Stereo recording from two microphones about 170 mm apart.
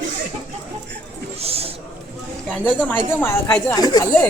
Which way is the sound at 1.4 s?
35° right (ahead or behind).